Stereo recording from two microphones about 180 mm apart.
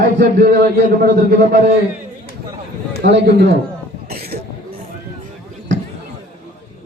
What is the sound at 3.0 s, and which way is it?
Speech, 65° right (ahead or behind).